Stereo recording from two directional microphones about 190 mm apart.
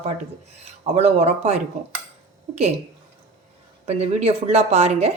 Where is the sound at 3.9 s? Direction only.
35° right (ahead or behind).